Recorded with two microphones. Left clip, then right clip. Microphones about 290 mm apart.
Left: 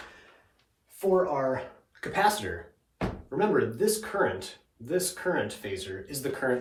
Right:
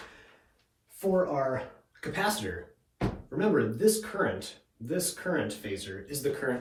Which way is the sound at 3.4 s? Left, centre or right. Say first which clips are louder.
Left 1 dB; centre.